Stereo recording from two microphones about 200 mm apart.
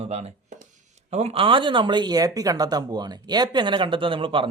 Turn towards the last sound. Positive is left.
turn(degrees=-25)  # may be behind; listen again after turning